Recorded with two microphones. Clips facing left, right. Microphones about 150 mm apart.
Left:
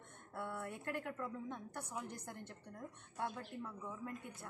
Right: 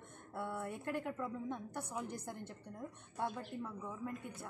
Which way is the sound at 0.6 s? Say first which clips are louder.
Right 4 dB; 20° right (ahead or behind).